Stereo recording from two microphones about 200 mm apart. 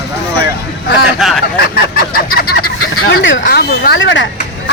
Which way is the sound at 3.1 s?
60° left (ahead or behind).